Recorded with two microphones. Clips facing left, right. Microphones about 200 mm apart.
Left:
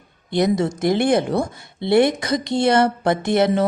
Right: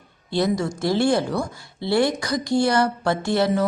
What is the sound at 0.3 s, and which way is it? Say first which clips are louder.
A woman's voice: left 3 dB; 20° left (ahead or behind).